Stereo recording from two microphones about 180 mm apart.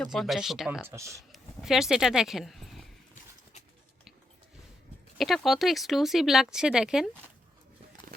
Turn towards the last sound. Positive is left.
turn(degrees=-5)  # may be behind; listen again after turning